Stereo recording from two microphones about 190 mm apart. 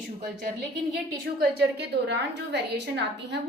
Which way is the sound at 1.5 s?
60° right (ahead or behind).